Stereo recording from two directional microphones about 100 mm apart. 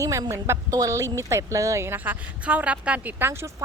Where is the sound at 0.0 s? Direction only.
30° right (ahead or behind).